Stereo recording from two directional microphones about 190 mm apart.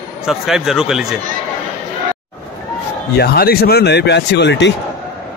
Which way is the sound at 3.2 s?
55° left (ahead or behind).